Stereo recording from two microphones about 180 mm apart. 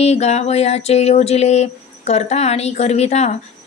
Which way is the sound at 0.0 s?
35° left (ahead or behind).